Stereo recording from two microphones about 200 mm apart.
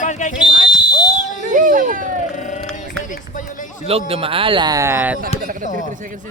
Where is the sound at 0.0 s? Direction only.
40° left (ahead or behind).